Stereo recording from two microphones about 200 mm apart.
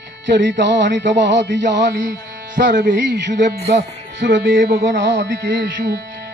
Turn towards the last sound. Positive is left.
turn(degrees=-60)  # may be behind; listen again after turning